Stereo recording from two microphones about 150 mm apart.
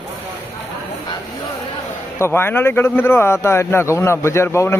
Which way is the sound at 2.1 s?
15° left (ahead or behind).